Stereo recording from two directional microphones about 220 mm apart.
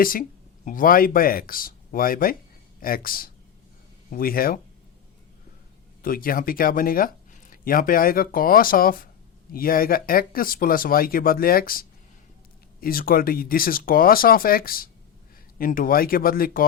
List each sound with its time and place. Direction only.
0.0 s speech: 40° left (ahead or behind)
6.0 s speech: 40° left (ahead or behind)